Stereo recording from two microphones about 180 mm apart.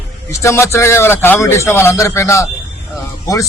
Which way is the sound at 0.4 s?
15° left (ahead or behind).